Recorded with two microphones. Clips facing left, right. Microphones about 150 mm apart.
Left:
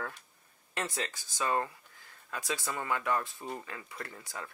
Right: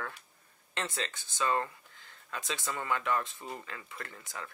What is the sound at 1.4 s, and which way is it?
Speech, 20° left (ahead or behind).